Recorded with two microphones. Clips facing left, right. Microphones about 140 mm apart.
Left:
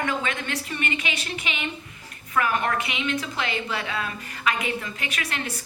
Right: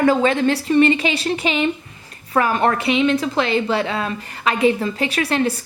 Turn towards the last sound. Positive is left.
turn(degrees=-30)  # may be behind; listen again after turning